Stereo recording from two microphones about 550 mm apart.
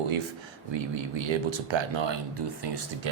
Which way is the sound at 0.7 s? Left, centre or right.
Right.